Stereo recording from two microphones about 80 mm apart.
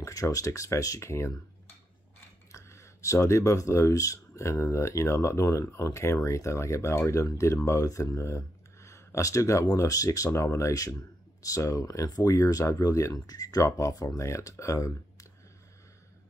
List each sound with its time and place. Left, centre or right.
0.0 s speech: left
2.5 s speech: left